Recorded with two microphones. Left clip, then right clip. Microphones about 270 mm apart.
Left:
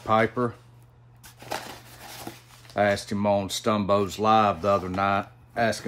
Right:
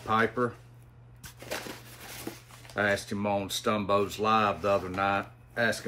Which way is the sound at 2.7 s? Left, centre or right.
Left.